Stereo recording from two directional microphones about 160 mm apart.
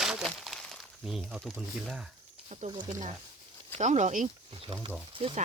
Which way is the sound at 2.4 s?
40° right (ahead or behind).